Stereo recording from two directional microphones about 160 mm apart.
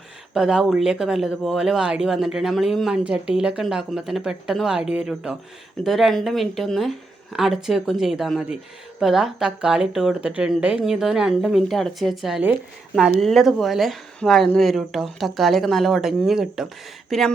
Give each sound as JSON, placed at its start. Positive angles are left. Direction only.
{"t": 0.3, "sound": "speech", "side_deg": -5}